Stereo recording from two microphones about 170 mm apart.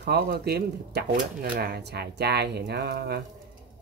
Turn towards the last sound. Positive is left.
turn(degrees=-70)  # may be behind; listen again after turning